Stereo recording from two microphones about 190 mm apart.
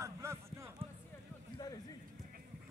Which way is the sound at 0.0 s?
15° right (ahead or behind).